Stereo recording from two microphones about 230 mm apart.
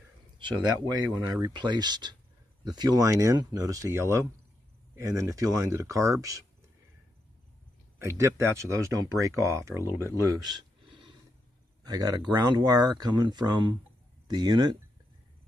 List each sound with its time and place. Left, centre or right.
0.4 s speech: centre
8.0 s speech: centre